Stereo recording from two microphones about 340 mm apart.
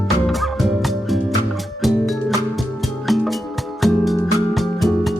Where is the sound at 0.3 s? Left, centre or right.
Centre.